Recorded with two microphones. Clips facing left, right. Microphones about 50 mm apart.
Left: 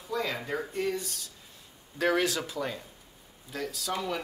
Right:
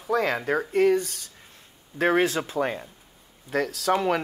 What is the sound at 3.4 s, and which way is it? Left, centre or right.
Speech, right.